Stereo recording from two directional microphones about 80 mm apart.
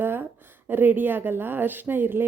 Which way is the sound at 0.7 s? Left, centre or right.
Right.